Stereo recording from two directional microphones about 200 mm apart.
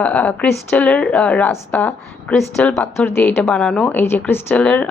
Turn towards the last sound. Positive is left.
turn(degrees=5)  # may be behind; listen again after turning